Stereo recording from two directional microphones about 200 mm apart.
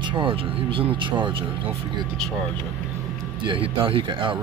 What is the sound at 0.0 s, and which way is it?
Speech, 25° right (ahead or behind).